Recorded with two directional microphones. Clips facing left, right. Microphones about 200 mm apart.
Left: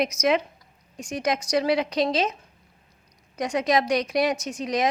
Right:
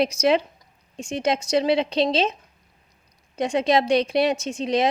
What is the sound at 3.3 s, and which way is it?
A woman's voice, 25° right (ahead or behind).